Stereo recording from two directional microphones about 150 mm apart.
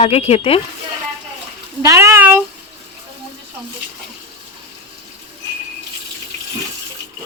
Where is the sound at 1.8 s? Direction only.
20° right (ahead or behind).